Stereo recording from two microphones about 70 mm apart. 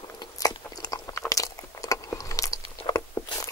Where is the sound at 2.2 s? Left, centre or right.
Left.